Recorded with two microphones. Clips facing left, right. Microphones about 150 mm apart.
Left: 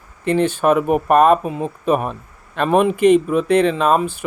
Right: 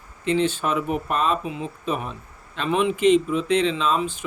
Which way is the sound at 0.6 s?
55° left (ahead or behind).